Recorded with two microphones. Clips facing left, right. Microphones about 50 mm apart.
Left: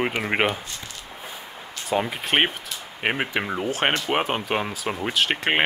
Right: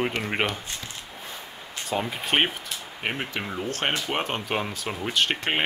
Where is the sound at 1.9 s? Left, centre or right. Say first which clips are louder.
Left 4 dB; centre.